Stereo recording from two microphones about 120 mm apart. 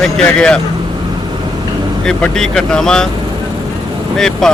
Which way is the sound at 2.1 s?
5° left (ahead or behind).